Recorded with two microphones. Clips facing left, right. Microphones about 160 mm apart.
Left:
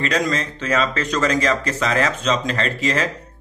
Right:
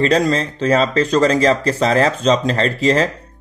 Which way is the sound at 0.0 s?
35° right (ahead or behind).